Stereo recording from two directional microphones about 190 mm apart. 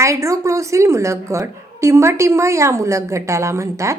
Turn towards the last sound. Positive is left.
turn(degrees=-15)  # may be behind; listen again after turning